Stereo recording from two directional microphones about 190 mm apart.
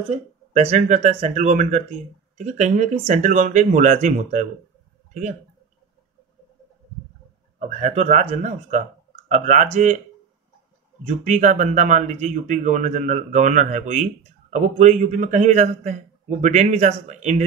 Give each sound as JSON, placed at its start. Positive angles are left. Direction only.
{"t": 0.5, "sound": "speech", "side_deg": -35}
{"t": 7.5, "sound": "speech", "side_deg": -40}
{"t": 11.1, "sound": "speech", "side_deg": -40}